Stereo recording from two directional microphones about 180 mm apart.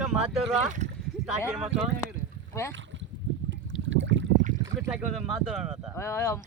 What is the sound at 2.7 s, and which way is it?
Boat, 90° right.